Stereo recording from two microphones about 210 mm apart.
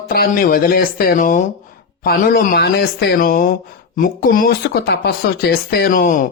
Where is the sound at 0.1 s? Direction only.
45° left (ahead or behind).